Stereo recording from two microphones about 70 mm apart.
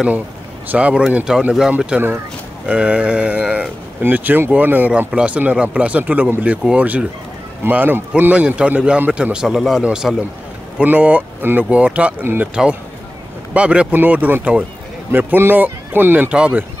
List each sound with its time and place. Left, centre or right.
0.7 s speech: centre
7.6 s speech: right; by 10.1 s centre
10.8 s speech: right
12.2 s speech: right
13.5 s speech: centre
15.0 s speech: right
16.3 s speech: centre